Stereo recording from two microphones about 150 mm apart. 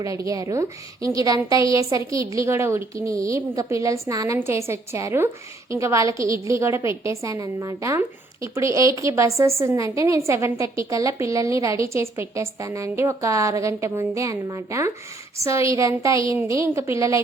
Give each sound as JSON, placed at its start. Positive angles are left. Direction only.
{"t": 0.0, "sound": "a woman's voice", "side_deg": -20}